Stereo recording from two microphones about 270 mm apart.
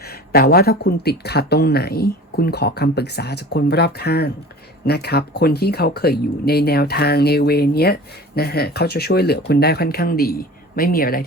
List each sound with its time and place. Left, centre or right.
0.3 s speech: left